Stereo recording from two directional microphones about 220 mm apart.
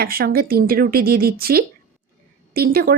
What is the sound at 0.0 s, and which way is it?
Speech, 40° right (ahead or behind).